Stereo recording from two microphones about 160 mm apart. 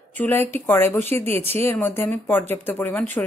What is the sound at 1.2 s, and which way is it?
Speech, 40° right (ahead or behind).